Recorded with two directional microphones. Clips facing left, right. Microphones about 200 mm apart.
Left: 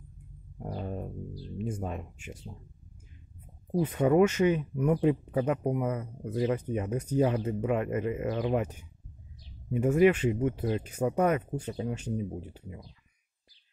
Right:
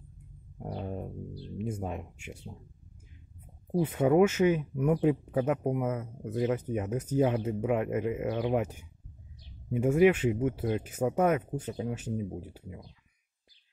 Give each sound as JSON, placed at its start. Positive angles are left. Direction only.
{"t": 0.6, "sound": "a sound", "side_deg": -5}
{"t": 1.6, "sound": "speech", "side_deg": -10}
{"t": 3.7, "sound": "speech", "side_deg": -10}